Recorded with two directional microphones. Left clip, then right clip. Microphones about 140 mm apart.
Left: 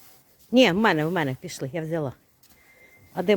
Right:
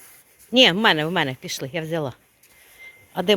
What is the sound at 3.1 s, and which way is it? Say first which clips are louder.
Speech: right 3 dB; 15° left (ahead or behind).